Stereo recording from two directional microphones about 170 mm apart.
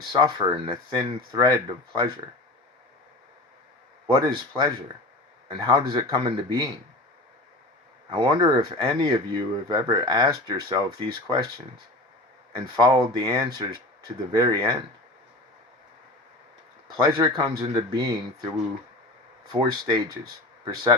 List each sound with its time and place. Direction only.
0.0 s speech: 25° right (ahead or behind)
4.0 s speech: 25° right (ahead or behind)
8.1 s speech: 25° right (ahead or behind)
17.0 s speech: 25° right (ahead or behind)
19.5 s speech: 25° right (ahead or behind)